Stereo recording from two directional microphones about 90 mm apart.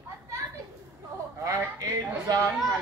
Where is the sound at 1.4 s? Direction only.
35° right (ahead or behind).